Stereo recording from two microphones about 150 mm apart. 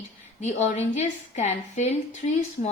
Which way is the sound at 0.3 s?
50° left (ahead or behind).